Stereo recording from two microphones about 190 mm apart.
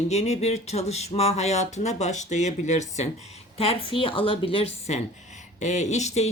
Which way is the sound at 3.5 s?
30° left (ahead or behind).